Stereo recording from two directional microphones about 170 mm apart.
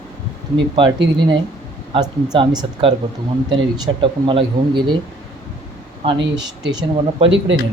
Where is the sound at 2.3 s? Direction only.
25° right (ahead or behind).